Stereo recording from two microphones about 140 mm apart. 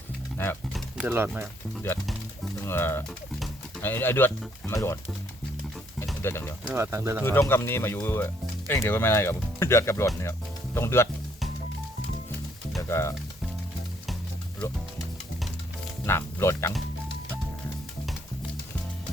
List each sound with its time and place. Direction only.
0.4 s speech: 15° left (ahead or behind)
1.0 s speech: 15° right (ahead or behind)
2.6 s speech: 15° left (ahead or behind)
6.2 s speech: 15° left (ahead or behind)
6.7 s speech: 20° right (ahead or behind)
7.3 s speech: 15° left (ahead or behind)
12.9 s speech: 20° left (ahead or behind)
16.0 s speech: 15° left (ahead or behind)